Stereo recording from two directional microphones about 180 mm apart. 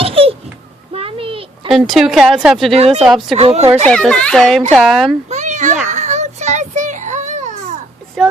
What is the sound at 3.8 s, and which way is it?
Speech, 5° left (ahead or behind).